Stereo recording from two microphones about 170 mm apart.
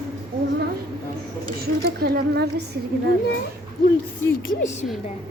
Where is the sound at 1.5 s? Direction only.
65° right (ahead or behind).